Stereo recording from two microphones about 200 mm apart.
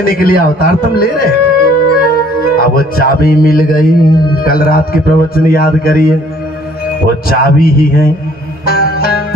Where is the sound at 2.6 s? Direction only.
50° left (ahead or behind).